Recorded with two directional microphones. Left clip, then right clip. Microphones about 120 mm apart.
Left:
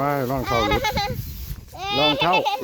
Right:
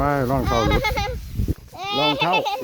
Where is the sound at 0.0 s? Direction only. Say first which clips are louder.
Right 2 dB; 10° right (ahead or behind).